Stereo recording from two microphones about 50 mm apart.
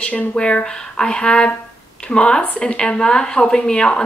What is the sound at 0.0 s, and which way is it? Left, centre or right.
A woman's voice, left.